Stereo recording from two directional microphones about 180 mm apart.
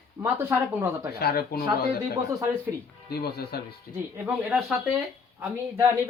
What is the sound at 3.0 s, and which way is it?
Speech, 60° left (ahead or behind).